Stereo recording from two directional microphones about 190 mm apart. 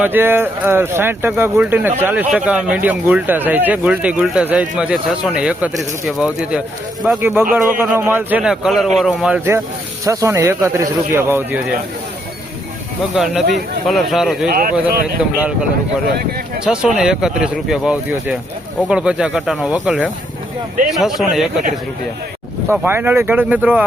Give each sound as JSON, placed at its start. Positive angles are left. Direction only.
{"t": 0.0, "sound": "speech", "side_deg": -10}
{"t": 13.1, "sound": "speech", "side_deg": -5}
{"t": 14.5, "sound": "speech", "side_deg": -50}
{"t": 16.6, "sound": "speech", "side_deg": -5}
{"t": 21.0, "sound": "speech", "side_deg": 0}
{"t": 22.7, "sound": "speech", "side_deg": -10}